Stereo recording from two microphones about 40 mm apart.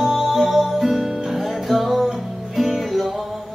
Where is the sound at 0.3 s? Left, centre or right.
Centre.